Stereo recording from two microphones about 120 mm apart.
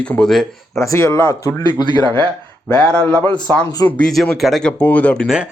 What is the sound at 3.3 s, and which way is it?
Speech, 10° left (ahead or behind).